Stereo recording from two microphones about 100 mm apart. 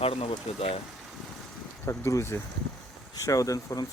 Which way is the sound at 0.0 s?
70° left (ahead or behind).